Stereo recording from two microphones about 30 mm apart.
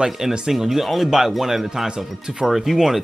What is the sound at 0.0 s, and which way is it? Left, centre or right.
Speech, right.